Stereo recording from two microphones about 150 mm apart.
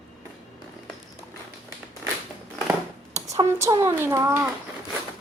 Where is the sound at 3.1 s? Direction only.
20° right (ahead or behind).